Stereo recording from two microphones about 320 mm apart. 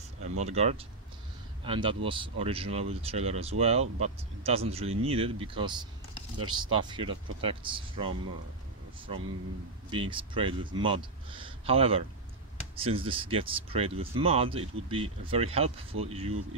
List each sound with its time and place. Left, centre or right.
0.4 s speech: centre
9.8 s speech: centre